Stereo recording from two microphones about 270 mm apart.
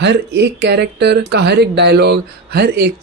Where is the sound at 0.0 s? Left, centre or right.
Right.